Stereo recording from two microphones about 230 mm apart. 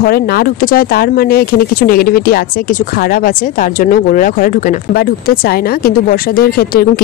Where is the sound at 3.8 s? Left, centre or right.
Left.